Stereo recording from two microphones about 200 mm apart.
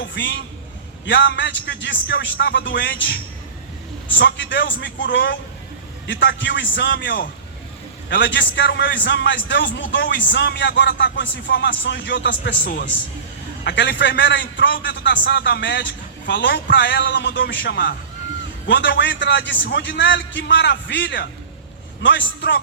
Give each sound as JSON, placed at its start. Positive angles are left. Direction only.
{"t": 0.0, "sound": "a woman's voice", "side_deg": 65}
{"t": 4.2, "sound": "a man's voice", "side_deg": 60}
{"t": 13.7, "sound": "a man's voice", "side_deg": 60}